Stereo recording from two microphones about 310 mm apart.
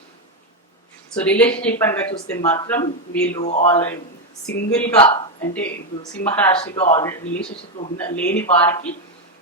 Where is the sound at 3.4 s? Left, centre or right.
Left.